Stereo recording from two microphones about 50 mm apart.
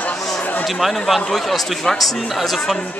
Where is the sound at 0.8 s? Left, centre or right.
Centre.